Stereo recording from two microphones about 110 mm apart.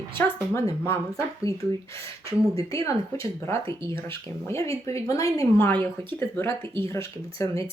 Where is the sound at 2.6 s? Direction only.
30° left (ahead or behind).